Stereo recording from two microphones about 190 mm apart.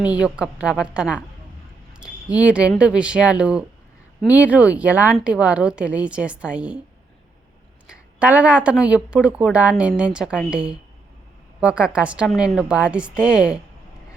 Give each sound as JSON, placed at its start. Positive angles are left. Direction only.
{"t": 0.0, "sound": "a woman's voice", "side_deg": -5}
{"t": 8.2, "sound": "a woman's voice", "side_deg": -5}